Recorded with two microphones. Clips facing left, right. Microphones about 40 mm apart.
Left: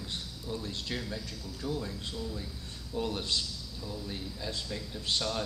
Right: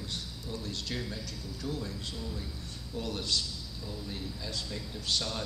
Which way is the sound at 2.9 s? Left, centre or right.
Left.